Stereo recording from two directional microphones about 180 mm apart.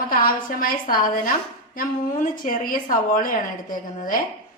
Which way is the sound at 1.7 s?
50° left (ahead or behind).